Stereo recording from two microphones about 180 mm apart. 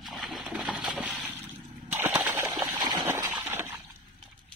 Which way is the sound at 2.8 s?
25° right (ahead or behind).